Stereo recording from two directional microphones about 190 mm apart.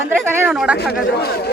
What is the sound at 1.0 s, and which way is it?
Speech, 55° left (ahead or behind).